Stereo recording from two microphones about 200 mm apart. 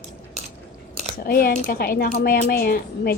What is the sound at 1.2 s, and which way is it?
Speech, 50° left (ahead or behind).